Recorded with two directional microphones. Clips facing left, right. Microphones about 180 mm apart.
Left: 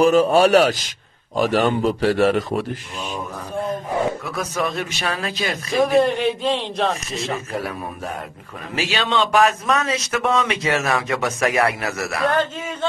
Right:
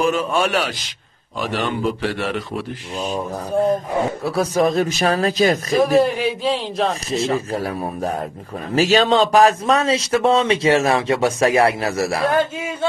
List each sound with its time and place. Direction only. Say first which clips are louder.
0.0 s rub: left 5 dB; 40° left (ahead or behind)
1.3 s a man's voice: left 5 dB; 45° left (ahead or behind)
3.0 s a man's voice: right 10 dB; 40° right (ahead or behind)
5.8 s speech: left 1 dB; centre (ahead or behind)
7.3 s a man's voice: right 4 dB; 35° right (ahead or behind)
12.3 s a man's voice: right 2 dB; 10° right (ahead or behind)